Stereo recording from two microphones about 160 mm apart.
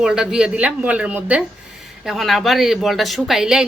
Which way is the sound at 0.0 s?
5° right (ahead or behind).